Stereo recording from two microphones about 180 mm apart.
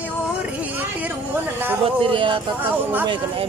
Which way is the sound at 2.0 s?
30° right (ahead or behind).